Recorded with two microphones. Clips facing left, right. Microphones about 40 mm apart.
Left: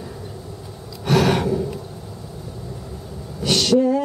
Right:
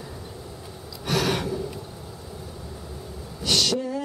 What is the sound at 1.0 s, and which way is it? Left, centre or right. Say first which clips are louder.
Gasp: left 7 dB; left.